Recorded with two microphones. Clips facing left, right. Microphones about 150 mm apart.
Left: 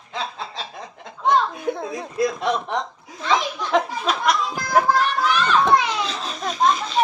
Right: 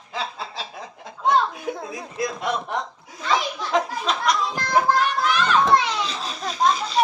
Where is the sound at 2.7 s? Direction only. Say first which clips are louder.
Left 2 dB; 5° right (ahead or behind).